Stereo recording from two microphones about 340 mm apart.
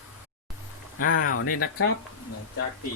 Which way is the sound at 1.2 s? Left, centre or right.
Left.